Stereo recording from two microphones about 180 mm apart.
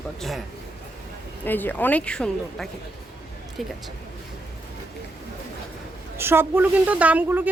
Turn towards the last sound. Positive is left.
turn(degrees=-10)  # may be behind; listen again after turning